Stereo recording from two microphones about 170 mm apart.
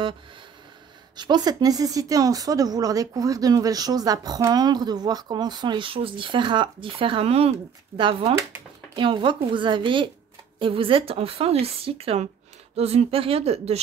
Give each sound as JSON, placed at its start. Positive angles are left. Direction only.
{"t": 1.1, "sound": "a woman's voice", "side_deg": -25}